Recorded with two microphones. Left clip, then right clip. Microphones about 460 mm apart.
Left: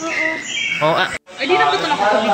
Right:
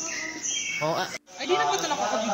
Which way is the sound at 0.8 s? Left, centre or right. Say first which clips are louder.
Left 11 dB; right.